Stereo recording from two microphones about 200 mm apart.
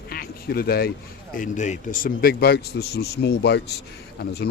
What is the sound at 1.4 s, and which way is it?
A man's voice, 35° left (ahead or behind).